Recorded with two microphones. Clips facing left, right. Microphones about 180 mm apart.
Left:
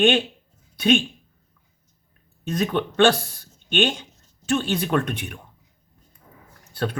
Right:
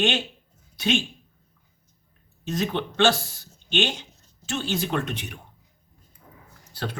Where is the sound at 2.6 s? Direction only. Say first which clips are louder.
Left 4 dB; 55° left (ahead or behind).